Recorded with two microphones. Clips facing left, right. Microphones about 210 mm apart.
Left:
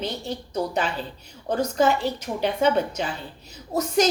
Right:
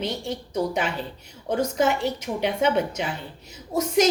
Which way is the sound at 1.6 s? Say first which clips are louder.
Left 1 dB; 20° right (ahead or behind).